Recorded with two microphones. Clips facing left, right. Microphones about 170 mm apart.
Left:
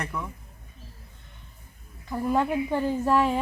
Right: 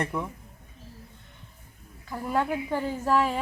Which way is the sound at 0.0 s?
25° right (ahead or behind).